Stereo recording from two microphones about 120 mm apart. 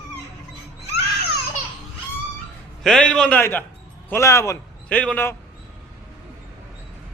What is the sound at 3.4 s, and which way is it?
A man's voice, 15° left (ahead or behind).